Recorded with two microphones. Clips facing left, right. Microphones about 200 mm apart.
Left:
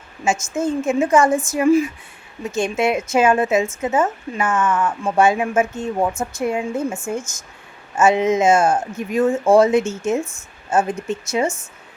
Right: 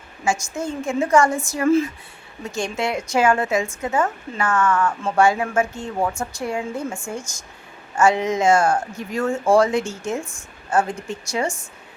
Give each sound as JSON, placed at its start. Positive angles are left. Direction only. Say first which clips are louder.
{"t": 0.3, "sound": "speech", "louder": "left 4 dB", "side_deg": 20}